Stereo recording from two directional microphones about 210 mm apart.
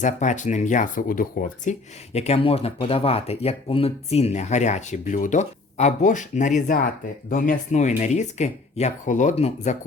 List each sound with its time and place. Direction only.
0.0 s speech: 35° left (ahead or behind)
2.1 s speech: 30° left (ahead or behind)